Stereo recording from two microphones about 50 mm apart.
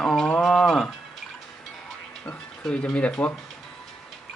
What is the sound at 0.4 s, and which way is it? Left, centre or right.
Mechanisms, centre.